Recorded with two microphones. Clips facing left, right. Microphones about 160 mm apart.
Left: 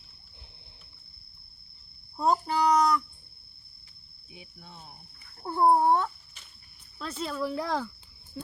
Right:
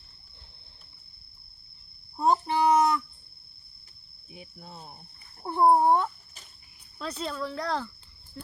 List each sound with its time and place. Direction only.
2.1 s speech: 25° right (ahead or behind)
4.3 s cricket: 40° right (ahead or behind)
5.4 s a sound: 20° right (ahead or behind)
7.0 s speech: 5° left (ahead or behind)